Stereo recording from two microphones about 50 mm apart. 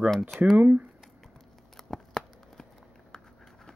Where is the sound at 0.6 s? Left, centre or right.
Right.